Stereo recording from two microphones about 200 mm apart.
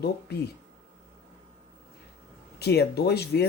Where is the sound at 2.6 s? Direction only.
55° left (ahead or behind).